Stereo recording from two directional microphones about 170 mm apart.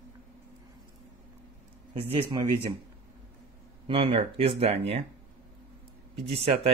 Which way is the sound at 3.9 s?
35° right (ahead or behind).